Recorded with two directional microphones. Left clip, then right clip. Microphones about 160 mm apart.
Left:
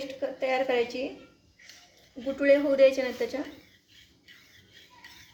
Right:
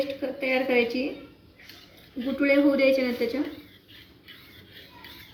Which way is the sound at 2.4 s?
65° left (ahead or behind).